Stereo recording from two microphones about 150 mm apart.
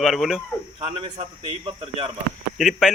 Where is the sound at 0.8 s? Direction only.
35° right (ahead or behind).